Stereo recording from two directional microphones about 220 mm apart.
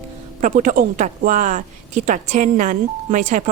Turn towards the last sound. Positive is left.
turn(degrees=-35)  # may be behind; listen again after turning